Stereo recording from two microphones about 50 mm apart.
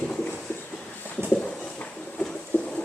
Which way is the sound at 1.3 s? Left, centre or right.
Left.